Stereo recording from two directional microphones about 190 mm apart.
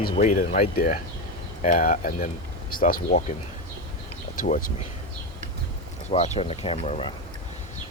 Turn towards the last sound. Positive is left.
turn(degrees=30)  # may be behind; listen again after turning